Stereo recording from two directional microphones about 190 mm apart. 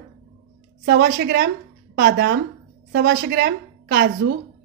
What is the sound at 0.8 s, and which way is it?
A woman's voice, 60° right (ahead or behind).